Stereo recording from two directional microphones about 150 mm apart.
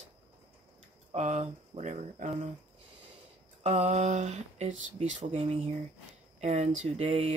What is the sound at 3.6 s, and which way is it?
Speech, 50° right (ahead or behind).